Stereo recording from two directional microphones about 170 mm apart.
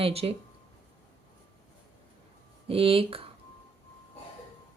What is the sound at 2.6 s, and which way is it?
Speech, 35° right (ahead or behind).